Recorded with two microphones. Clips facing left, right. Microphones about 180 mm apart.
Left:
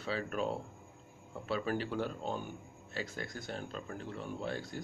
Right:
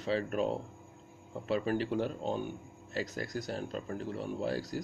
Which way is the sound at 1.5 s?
35° right (ahead or behind).